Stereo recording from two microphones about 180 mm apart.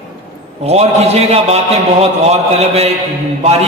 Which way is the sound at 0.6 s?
35° right (ahead or behind).